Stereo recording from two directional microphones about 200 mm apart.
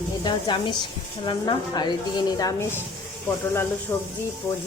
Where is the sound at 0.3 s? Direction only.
25° left (ahead or behind).